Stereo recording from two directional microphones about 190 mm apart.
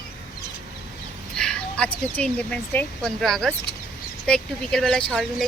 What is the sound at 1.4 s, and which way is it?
A woman's voice, 5° left (ahead or behind).